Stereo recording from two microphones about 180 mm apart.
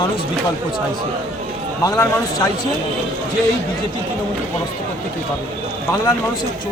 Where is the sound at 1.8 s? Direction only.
20° left (ahead or behind).